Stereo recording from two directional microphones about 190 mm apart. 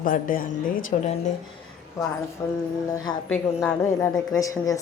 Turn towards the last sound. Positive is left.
turn(degrees=20)  # may be behind; listen again after turning